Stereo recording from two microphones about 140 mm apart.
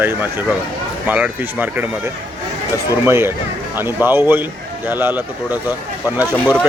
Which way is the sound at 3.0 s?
15° right (ahead or behind).